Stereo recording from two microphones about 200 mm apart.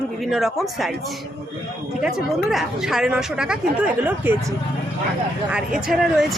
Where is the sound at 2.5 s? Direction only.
Centre (ahead or behind).